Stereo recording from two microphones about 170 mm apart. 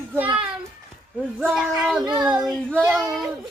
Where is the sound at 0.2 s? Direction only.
5° right (ahead or behind).